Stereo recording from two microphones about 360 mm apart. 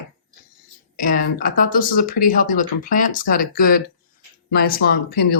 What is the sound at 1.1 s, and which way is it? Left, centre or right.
Speech, left.